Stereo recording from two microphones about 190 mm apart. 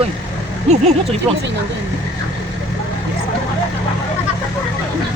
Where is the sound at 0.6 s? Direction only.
35° right (ahead or behind).